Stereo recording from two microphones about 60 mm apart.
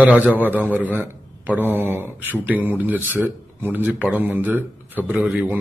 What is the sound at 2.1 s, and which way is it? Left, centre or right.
A man's voice, right.